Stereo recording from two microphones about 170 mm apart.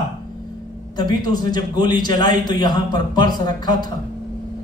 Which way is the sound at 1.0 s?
25° left (ahead or behind).